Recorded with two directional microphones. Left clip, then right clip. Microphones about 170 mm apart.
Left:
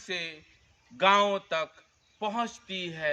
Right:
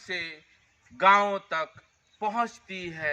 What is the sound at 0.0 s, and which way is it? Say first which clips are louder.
A man's voice: right 1 dB; 20° left (ahead or behind).